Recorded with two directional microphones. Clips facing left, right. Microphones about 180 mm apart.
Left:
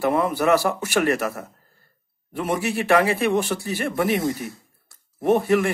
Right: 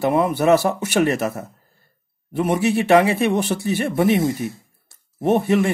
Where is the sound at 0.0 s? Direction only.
20° right (ahead or behind).